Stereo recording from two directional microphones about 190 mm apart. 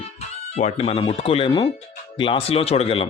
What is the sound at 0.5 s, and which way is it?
Speech, 35° left (ahead or behind).